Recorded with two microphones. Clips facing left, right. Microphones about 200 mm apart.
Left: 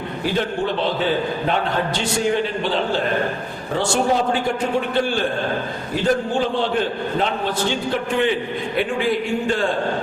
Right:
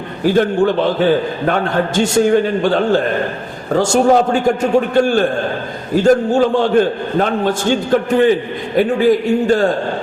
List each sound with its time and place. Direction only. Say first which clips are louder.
0.3 s a man's voice: right 9 dB; 50° right (ahead or behind)